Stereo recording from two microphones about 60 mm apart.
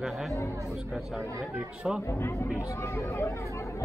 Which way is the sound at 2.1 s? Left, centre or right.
Left.